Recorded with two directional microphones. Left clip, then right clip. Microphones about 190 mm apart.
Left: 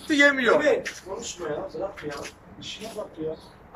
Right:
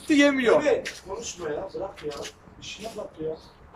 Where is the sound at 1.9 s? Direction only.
30° right (ahead or behind).